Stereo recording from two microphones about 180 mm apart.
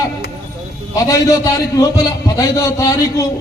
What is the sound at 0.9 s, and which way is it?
Speech, 20° left (ahead or behind).